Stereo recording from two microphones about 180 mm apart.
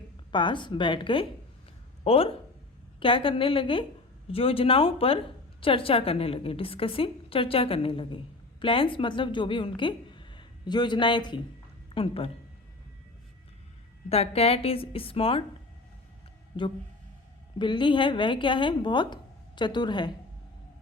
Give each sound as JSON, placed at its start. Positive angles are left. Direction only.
{"t": 0.3, "sound": "a woman's voice", "side_deg": 25}
{"t": 14.1, "sound": "a woman's voice", "side_deg": 35}
{"t": 17.6, "sound": "speech", "side_deg": 25}